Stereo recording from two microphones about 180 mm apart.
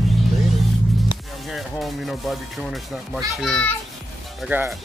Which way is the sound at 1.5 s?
Centre (ahead or behind).